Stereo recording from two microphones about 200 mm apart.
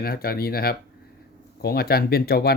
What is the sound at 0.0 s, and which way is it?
Speech, 50° left (ahead or behind).